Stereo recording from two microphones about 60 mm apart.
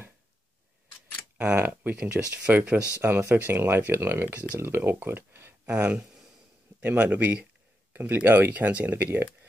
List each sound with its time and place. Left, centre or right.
1.6 s speech: right
2.5 s speech: right
5.7 s speech: right